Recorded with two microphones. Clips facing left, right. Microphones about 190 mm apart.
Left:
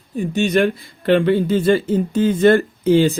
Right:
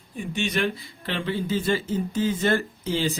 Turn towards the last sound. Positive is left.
turn(degrees=50)  # may be behind; listen again after turning